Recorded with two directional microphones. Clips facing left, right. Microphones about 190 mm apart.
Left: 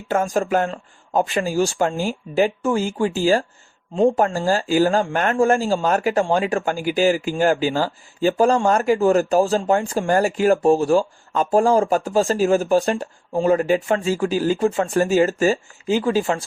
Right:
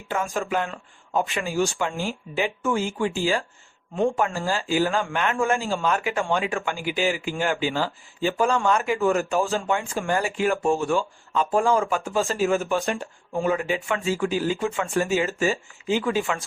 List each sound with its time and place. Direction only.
0.3 s speech: 40° left (ahead or behind)